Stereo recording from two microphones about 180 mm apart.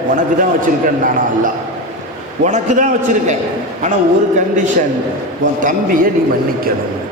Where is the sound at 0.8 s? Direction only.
50° right (ahead or behind).